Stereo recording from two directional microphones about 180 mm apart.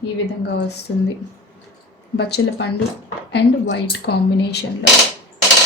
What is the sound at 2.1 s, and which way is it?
Speech, 65° left (ahead or behind).